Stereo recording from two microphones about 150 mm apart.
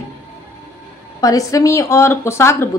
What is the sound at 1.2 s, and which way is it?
A woman's voice, 20° left (ahead or behind).